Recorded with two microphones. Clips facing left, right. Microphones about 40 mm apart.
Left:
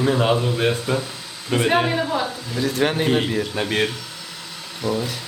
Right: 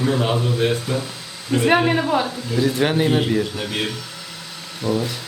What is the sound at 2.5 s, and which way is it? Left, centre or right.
Speech, centre.